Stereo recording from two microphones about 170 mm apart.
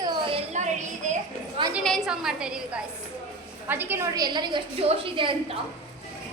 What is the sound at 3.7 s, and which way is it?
A woman's voice, 10° right (ahead or behind).